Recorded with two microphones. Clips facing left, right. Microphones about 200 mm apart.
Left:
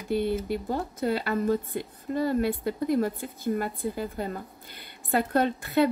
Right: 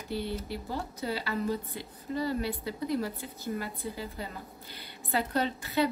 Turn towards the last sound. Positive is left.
turn(degrees=55)  # may be behind; listen again after turning